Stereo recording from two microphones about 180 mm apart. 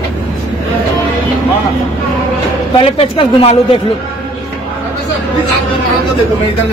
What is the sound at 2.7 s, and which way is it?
Speech, 30° left (ahead or behind).